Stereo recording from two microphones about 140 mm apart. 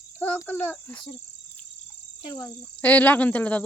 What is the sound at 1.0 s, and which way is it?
Cricket, 35° left (ahead or behind).